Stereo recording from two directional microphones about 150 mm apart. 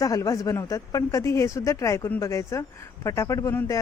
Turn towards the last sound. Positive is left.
turn(degrees=20)  # may be behind; listen again after turning